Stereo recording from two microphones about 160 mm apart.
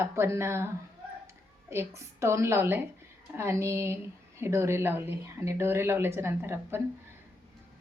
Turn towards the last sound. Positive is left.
turn(degrees=-15)  # may be behind; listen again after turning